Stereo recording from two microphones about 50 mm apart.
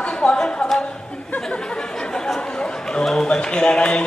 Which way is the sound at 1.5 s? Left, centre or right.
Centre.